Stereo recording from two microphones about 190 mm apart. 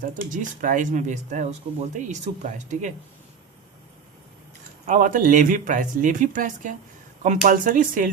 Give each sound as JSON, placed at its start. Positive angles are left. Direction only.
{"t": 0.0, "sound": "speech", "side_deg": -45}
{"t": 4.9, "sound": "speech", "side_deg": -45}